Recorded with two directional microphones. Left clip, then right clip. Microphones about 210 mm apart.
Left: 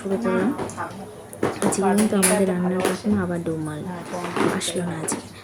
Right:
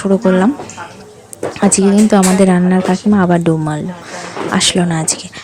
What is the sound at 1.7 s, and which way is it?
A woman's voice, 40° right (ahead or behind).